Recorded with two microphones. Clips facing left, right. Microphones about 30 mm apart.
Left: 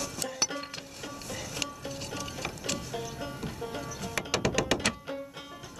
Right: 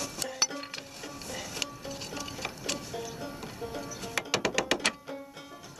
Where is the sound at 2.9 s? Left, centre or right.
Centre.